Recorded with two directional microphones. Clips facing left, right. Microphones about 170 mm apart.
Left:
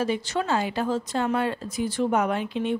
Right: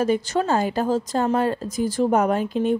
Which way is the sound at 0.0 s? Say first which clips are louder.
Right 5 dB; 45° right (ahead or behind).